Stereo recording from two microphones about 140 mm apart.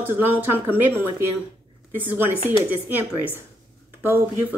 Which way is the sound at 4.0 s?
15° right (ahead or behind).